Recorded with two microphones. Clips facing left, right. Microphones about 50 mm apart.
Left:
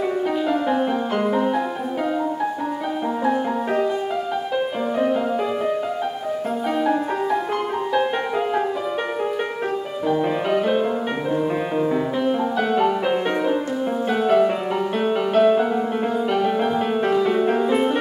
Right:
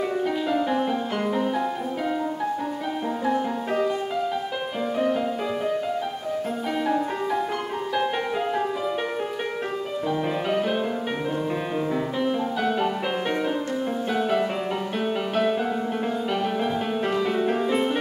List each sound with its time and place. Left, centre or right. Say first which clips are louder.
0.5 s music: left 2 dB; centre
3.3 s music: left 3 dB; centre
4.9 s music: left 3 dB; centre
10.0 s music: left 5 dB; centre
11.9 s music: left 4 dB; centre
14.1 s music: left 7 dB; centre